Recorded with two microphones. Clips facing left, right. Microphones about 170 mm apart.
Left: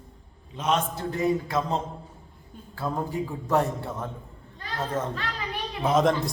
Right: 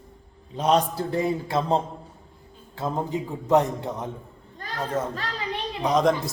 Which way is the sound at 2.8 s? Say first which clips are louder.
Right 1 dB; 20° right (ahead or behind).